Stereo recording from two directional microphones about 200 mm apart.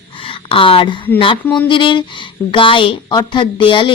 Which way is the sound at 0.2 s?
25° left (ahead or behind).